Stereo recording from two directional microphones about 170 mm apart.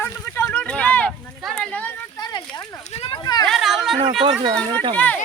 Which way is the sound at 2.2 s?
25° left (ahead or behind).